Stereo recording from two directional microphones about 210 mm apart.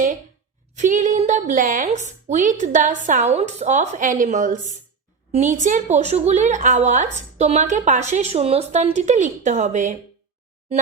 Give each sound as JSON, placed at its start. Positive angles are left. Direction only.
{"t": 0.8, "sound": "a woman's voice", "side_deg": -35}